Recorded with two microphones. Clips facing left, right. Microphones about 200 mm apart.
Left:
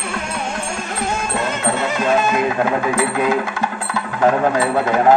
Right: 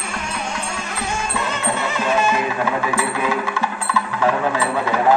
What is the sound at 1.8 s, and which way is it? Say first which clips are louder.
Music: left 3 dB; 45° left (ahead or behind).